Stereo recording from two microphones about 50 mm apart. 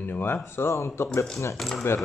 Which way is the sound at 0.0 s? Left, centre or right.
Left.